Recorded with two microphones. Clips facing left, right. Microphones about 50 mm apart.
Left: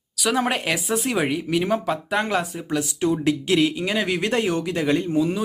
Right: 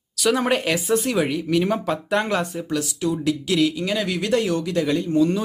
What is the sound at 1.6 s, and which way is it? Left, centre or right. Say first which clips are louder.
Speech: even; centre.